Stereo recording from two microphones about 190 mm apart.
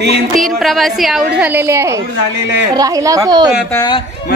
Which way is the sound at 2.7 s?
20° right (ahead or behind).